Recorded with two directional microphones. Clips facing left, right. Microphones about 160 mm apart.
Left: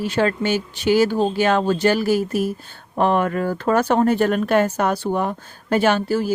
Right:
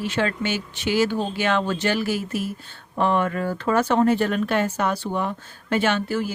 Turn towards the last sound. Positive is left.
turn(degrees=35)  # may be behind; listen again after turning